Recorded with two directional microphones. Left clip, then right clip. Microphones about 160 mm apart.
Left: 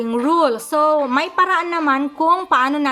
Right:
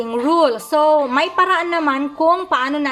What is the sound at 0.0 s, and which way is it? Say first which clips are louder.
Speech: right 1 dB; 15° left (ahead or behind).